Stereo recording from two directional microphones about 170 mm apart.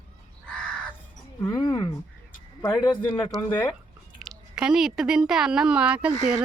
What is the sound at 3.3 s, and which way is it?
Speech, centre (ahead or behind).